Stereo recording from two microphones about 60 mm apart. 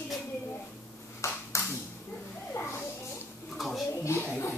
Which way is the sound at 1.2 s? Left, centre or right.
Left.